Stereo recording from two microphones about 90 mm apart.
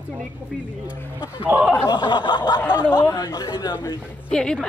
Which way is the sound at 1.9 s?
60° left (ahead or behind).